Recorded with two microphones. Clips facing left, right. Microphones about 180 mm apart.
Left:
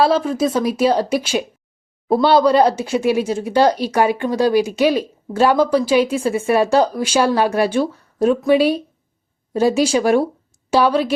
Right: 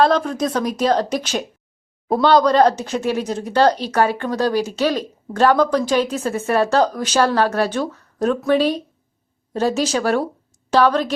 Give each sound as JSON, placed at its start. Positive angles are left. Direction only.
{"t": 0.0, "sound": "a woman's voice", "side_deg": 5}